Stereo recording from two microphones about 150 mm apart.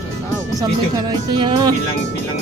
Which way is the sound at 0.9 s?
30° right (ahead or behind).